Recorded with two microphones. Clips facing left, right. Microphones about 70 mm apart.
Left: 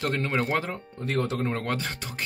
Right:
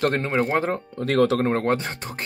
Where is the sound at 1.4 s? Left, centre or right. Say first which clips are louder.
Right 7 dB; right.